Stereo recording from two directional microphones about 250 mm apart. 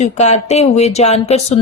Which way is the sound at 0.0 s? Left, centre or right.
Left.